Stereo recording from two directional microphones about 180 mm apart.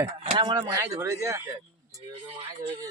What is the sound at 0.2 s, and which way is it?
Speech, 30° right (ahead or behind).